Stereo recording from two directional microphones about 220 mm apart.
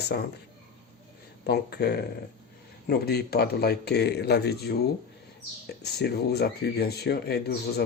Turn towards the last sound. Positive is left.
turn(degrees=50)  # may be behind; listen again after turning